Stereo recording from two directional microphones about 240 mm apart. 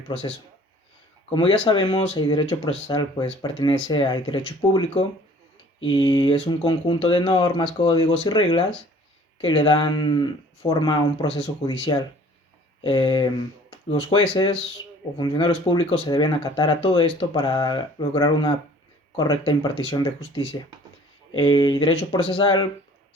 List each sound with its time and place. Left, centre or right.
0.1 s speech: left